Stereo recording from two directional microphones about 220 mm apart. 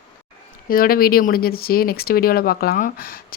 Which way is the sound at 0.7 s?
40° left (ahead or behind).